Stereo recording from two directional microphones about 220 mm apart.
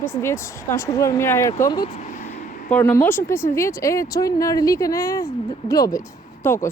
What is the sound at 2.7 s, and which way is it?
Speech, 5° left (ahead or behind).